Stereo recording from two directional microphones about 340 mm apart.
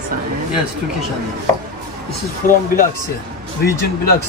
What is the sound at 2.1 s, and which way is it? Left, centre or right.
Speech, left.